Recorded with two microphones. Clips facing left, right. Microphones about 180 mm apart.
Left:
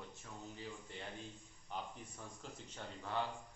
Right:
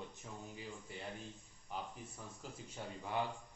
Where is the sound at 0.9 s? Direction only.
10° right (ahead or behind).